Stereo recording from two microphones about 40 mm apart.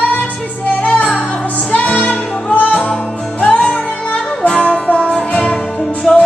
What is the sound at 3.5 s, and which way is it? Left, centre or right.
Music, left.